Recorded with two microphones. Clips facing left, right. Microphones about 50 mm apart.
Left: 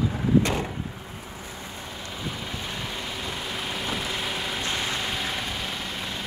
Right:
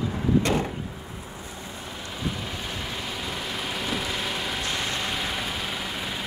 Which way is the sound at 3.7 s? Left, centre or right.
Centre.